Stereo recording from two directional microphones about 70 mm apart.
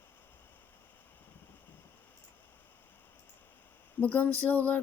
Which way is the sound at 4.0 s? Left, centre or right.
Left.